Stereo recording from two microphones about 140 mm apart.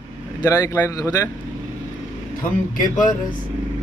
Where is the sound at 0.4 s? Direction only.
25° left (ahead or behind).